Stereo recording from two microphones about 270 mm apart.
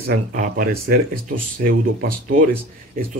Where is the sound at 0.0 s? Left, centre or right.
Right.